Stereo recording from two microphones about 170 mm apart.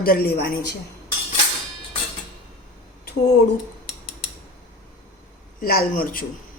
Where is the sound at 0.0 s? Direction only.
60° left (ahead or behind).